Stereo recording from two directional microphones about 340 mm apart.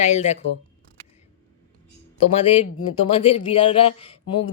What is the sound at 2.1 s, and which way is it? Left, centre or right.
Speech, centre.